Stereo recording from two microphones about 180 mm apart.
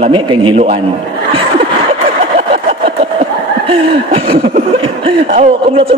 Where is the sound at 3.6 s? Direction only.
30° right (ahead or behind).